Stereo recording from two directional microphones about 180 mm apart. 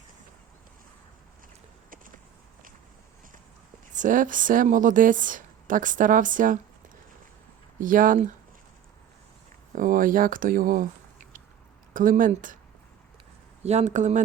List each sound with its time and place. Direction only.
3.9 s a woman's voice: 45° right (ahead or behind)
7.8 s a woman's voice: 50° right (ahead or behind)
9.7 s a woman's voice: 50° right (ahead or behind)
13.6 s speech: 40° right (ahead or behind)